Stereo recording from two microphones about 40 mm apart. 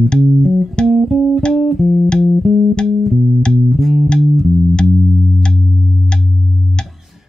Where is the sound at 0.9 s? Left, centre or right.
Centre.